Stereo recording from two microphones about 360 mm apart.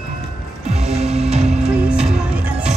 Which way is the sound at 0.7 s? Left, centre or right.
Centre.